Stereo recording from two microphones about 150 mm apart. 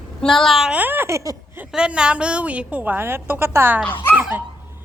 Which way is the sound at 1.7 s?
5° right (ahead or behind).